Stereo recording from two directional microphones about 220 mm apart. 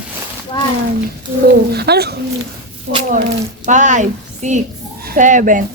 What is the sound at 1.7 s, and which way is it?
Speech, 45° right (ahead or behind).